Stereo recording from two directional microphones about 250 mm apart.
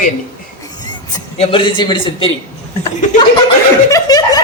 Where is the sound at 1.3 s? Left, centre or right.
Left.